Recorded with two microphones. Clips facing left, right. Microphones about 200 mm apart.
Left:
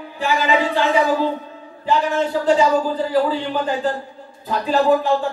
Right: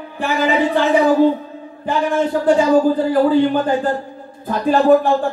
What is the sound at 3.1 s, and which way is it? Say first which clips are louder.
Speech: right 5 dB; 50° right (ahead or behind).